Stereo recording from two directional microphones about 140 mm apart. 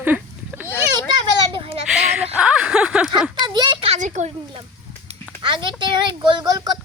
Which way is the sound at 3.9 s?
60° right (ahead or behind).